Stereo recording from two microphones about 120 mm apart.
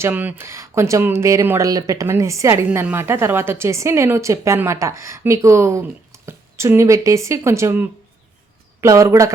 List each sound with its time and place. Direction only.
0.0 s speech: 15° right (ahead or behind)